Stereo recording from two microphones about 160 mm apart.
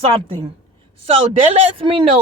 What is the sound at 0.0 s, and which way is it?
Speech, 35° right (ahead or behind).